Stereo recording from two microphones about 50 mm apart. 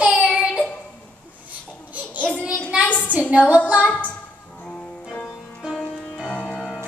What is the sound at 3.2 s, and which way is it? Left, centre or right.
Child singing, right.